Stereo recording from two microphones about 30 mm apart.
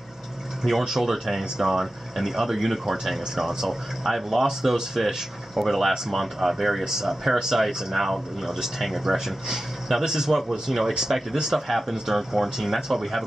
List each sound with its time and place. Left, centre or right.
0.7 s speech: centre
5.6 s speech: centre
6.8 s speech: centre
7.6 s speech: centre